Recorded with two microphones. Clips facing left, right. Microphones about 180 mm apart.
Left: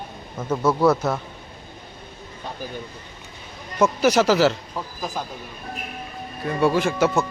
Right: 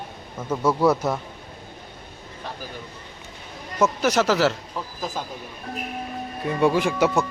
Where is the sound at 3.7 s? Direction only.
5° left (ahead or behind).